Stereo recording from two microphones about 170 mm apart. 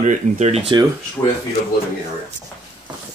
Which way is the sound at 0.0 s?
40° right (ahead or behind).